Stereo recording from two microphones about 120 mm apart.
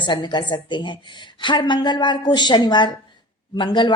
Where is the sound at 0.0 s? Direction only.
40° left (ahead or behind).